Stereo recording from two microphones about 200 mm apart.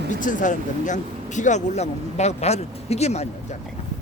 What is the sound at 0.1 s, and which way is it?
Speech, 40° left (ahead or behind).